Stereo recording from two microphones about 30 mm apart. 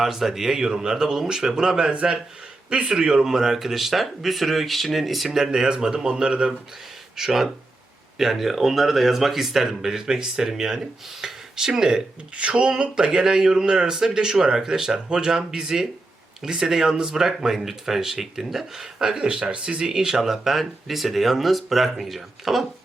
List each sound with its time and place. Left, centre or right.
0.0 s speech: centre
0.7 s speech: right
1.9 s speech: right
3.2 s speech: centre
5.3 s speech: centre
7.2 s speech: centre
12.4 s speech: right; by 19.0 s centre
19.0 s speech: right
20.2 s speech: centre